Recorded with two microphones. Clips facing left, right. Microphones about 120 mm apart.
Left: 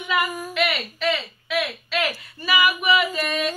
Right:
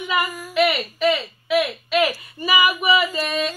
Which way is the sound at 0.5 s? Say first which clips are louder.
Right 5 dB; 5° right (ahead or behind).